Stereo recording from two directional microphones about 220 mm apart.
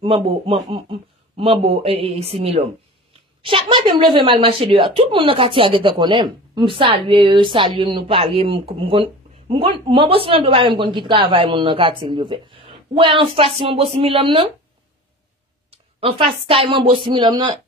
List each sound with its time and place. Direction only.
0.0 s a man's voice: 25° right (ahead or behind)
15.7 s a man's voice: 25° right (ahead or behind)